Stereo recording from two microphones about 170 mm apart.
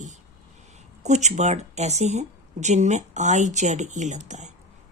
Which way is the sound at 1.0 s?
45° right (ahead or behind).